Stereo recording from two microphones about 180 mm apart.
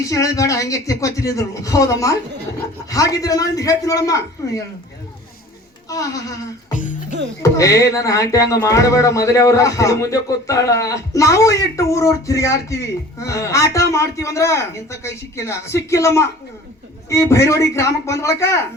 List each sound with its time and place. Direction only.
0.0 s a man's voice: 20° left (ahead or behind)
5.9 s a man's voice: 20° left (ahead or behind)
7.4 s speech: 20° left (ahead or behind)